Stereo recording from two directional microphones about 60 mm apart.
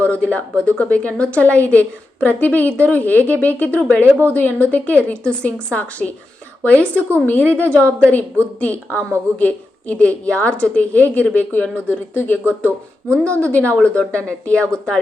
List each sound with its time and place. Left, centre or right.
0.0 s a woman's voice: left